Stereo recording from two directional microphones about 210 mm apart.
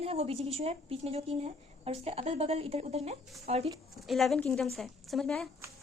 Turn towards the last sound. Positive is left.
turn(degrees=0)  # may be behind; listen again after turning